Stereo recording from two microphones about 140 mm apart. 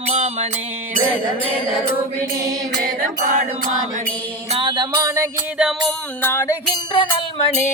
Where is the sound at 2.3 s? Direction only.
25° right (ahead or behind).